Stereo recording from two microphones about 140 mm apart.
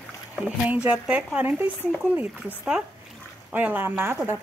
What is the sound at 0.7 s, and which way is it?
A woman's voice, 10° right (ahead or behind).